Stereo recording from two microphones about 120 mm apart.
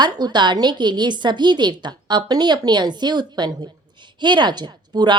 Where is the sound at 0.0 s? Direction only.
40° right (ahead or behind).